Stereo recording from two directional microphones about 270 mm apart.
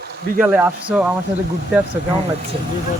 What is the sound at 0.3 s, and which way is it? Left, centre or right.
Speech, centre.